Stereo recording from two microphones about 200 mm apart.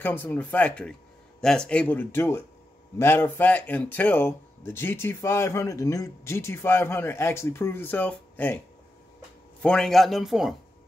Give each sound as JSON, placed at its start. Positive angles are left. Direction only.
{"t": 0.0, "sound": "speech", "side_deg": 10}
{"t": 9.6, "sound": "a man's voice", "side_deg": 5}